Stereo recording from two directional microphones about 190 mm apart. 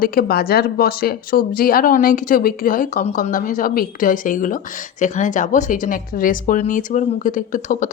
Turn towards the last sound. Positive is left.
turn(degrees=40)  # may be behind; listen again after turning